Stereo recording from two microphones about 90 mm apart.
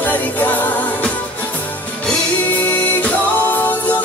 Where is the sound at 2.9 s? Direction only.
20° left (ahead or behind).